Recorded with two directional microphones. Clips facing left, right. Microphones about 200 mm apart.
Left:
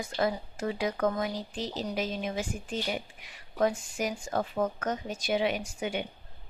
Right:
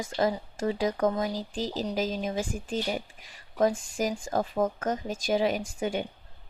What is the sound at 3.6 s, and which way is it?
Speech, 40° right (ahead or behind).